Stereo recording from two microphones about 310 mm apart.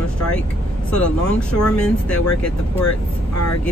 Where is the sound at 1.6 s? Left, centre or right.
Centre.